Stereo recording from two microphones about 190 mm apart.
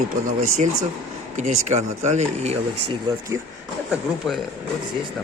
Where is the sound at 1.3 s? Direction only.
35° right (ahead or behind).